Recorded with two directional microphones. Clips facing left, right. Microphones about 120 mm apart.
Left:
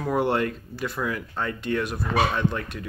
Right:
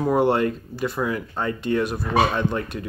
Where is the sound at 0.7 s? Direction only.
25° right (ahead or behind).